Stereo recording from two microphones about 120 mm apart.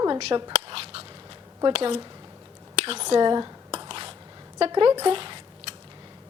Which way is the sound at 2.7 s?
55° right (ahead or behind).